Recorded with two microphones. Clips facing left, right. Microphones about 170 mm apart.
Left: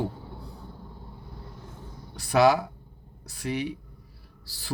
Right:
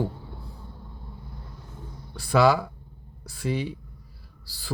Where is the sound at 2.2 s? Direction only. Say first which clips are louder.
Even; 20° left (ahead or behind).